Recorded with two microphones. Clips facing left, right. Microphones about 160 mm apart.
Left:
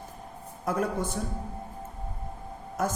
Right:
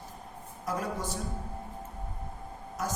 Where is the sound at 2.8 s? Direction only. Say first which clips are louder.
Left 5 dB; 55° left (ahead or behind).